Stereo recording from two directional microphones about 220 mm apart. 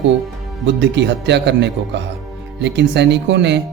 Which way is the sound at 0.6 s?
50° right (ahead or behind).